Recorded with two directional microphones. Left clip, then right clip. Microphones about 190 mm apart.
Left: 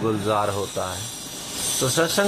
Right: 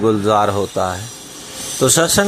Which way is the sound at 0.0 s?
20° right (ahead or behind).